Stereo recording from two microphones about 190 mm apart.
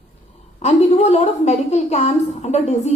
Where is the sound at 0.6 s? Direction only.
35° left (ahead or behind).